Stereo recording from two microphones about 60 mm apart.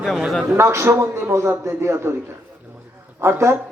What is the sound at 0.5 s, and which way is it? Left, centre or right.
A man's voice, right.